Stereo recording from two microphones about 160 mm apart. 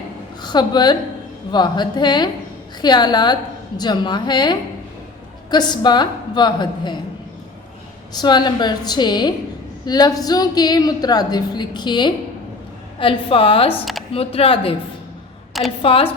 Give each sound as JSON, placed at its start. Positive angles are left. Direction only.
{"t": 0.4, "sound": "a woman's voice", "side_deg": 25}
{"t": 8.1, "sound": "a woman's voice", "side_deg": 25}
{"t": 15.8, "sound": "a woman's voice", "side_deg": 35}